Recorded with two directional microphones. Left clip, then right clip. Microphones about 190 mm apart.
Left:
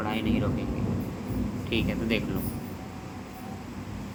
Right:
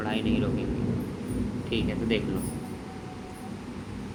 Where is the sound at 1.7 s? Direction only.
10° left (ahead or behind).